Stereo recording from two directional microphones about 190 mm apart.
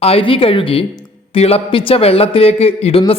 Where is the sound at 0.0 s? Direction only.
30° left (ahead or behind).